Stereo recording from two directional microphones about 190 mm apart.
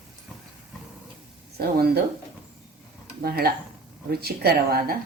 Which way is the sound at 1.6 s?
55° right (ahead or behind).